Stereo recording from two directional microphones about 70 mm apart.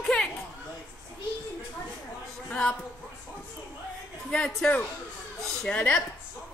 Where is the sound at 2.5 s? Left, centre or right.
Centre.